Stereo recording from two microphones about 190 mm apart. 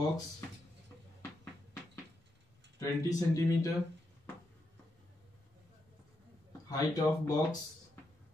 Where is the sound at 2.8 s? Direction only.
15° left (ahead or behind).